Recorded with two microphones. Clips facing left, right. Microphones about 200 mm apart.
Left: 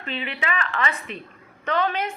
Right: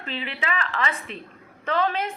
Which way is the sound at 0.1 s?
35° right (ahead or behind).